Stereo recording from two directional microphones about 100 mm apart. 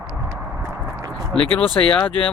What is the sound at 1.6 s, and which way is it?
Speech, 65° left (ahead or behind).